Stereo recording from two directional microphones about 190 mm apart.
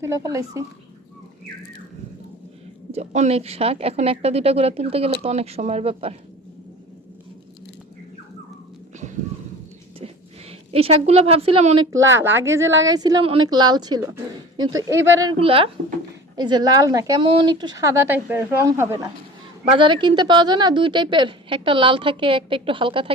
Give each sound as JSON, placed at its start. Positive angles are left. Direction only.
{"t": 0.0, "sound": "speech", "side_deg": -15}
{"t": 2.9, "sound": "a woman's voice", "side_deg": -35}
{"t": 10.7, "sound": "a woman's voice", "side_deg": -30}
{"t": 11.9, "sound": "a woman's voice", "side_deg": -15}
{"t": 15.4, "sound": "a woman's voice", "side_deg": -30}